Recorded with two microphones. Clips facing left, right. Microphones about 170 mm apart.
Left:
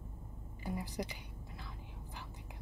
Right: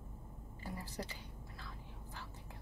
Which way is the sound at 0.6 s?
15° left (ahead or behind).